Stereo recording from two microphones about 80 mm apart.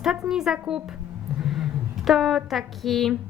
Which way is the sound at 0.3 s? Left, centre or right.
Centre.